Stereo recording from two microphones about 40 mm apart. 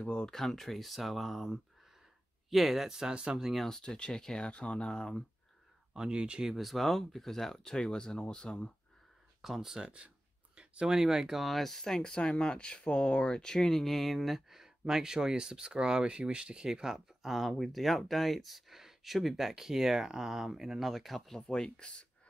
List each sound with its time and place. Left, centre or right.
0.0 s speech: left
0.3 s speech: centre
3.1 s speech: right
3.5 s speech: centre
4.5 s speech: left
5.9 s speech: right
6.4 s speech: centre; by 8.7 s left
9.4 s speech: centre
9.8 s a sound: right
10.9 s speech: centre
12.0 s speech: left
13.7 s speech: centre
21.4 s speech: centre